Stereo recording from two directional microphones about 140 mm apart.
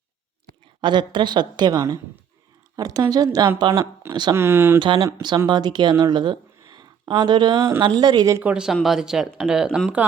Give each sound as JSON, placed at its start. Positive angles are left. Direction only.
{"t": 0.8, "sound": "a woman's voice", "side_deg": -35}
{"t": 3.6, "sound": "a woman's voice", "side_deg": -35}
{"t": 4.4, "sound": "speech", "side_deg": -15}
{"t": 4.8, "sound": "a woman's voice", "side_deg": -35}
{"t": 8.4, "sound": "speech", "side_deg": -10}